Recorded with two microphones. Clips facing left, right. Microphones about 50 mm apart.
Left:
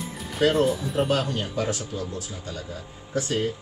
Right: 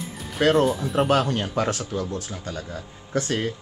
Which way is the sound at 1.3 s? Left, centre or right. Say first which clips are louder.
Right 3 dB; right.